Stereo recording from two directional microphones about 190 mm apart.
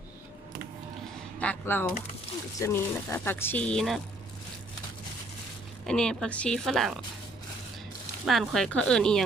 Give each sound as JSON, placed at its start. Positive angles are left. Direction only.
{"t": 1.4, "sound": "a sound", "side_deg": 10}
{"t": 2.6, "sound": "speech", "side_deg": 15}
{"t": 5.8, "sound": "speech", "side_deg": 5}
{"t": 8.2, "sound": "speech", "side_deg": 0}